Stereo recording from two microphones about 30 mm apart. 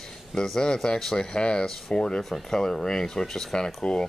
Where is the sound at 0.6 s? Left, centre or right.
Left.